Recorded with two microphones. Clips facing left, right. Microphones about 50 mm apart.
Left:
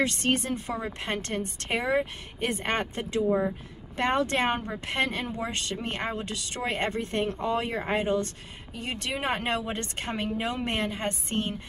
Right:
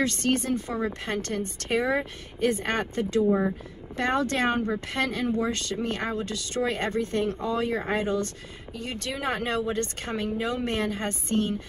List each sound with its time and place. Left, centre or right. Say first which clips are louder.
0.0 s a woman's voice: right 1 dB; left
3.3 s speech: left 1 dB; centre
3.9 s a woman's voice: even; left